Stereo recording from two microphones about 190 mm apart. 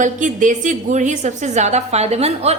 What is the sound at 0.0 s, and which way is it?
A woman's voice, 40° right (ahead or behind).